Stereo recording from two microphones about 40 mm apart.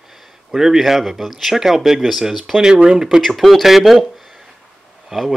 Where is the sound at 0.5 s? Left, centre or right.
Centre.